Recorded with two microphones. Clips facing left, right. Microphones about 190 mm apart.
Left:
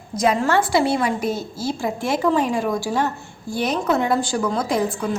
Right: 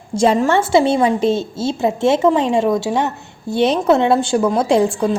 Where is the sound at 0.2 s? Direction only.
25° right (ahead or behind).